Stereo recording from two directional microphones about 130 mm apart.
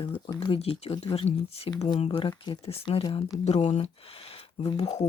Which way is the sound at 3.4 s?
55° left (ahead or behind).